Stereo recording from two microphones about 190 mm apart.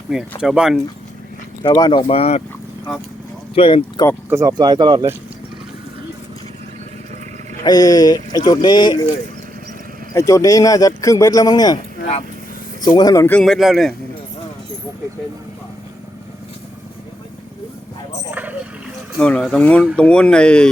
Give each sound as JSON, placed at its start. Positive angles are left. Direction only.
{"t": 0.1, "sound": "speech", "side_deg": 0}
{"t": 1.6, "sound": "speech", "side_deg": 25}
{"t": 3.5, "sound": "speech", "side_deg": 30}
{"t": 4.3, "sound": "speech", "side_deg": -15}
{"t": 7.6, "sound": "speech", "side_deg": 20}
{"t": 10.2, "sound": "speech", "side_deg": 15}
{"t": 12.8, "sound": "speech", "side_deg": 20}
{"t": 18.3, "sound": "vehicle", "side_deg": -10}
{"t": 19.1, "sound": "speech", "side_deg": 5}